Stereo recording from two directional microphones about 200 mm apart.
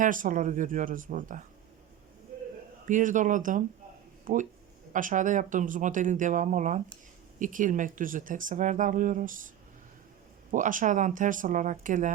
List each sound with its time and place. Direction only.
0.0 s speech: 40° right (ahead or behind)
2.8 s speech: 40° right (ahead or behind)
10.5 s speech: 40° right (ahead or behind)